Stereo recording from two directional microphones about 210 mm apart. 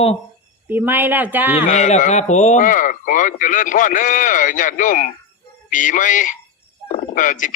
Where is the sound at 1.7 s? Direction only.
35° left (ahead or behind).